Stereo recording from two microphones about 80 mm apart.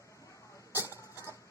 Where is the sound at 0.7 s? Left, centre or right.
Left.